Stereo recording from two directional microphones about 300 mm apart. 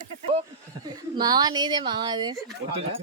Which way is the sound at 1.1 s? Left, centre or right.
Centre.